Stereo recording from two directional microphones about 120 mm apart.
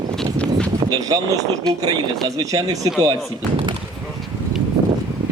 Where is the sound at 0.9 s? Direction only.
30° right (ahead or behind).